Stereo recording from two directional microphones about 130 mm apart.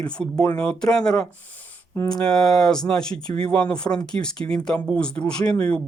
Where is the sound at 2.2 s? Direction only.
5° left (ahead or behind).